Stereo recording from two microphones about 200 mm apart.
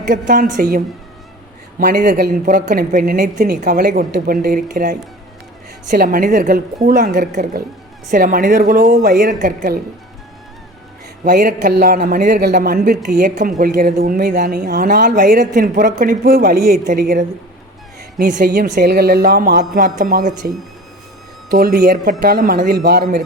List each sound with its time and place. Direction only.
0.1 s speech: 45° right (ahead or behind)
1.8 s speech: 45° right (ahead or behind)
11.2 s speech: 45° right (ahead or behind)
18.3 s speech: 45° right (ahead or behind)
21.5 s speech: 45° right (ahead or behind)